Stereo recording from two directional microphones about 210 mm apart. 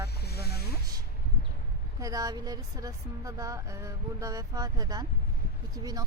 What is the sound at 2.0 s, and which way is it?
Speech, 15° right (ahead or behind).